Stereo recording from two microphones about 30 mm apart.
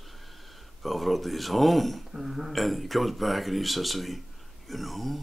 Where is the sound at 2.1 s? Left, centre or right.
Centre.